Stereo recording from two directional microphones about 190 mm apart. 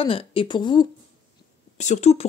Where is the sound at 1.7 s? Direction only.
40° left (ahead or behind).